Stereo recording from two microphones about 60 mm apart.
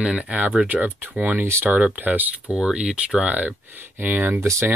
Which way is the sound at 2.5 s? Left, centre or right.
Centre.